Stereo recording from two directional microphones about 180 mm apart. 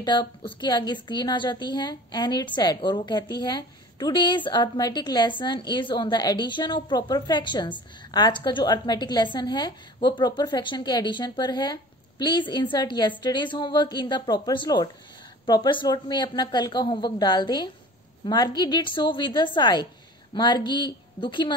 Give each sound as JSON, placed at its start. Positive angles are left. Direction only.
{"t": 0.0, "sound": "a woman's voice", "side_deg": 25}